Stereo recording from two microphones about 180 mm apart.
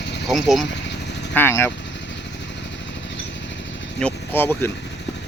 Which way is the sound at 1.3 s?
15° left (ahead or behind).